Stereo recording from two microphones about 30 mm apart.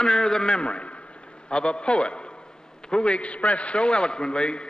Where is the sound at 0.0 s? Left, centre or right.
Left.